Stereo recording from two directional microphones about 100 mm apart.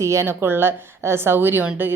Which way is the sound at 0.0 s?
30° right (ahead or behind).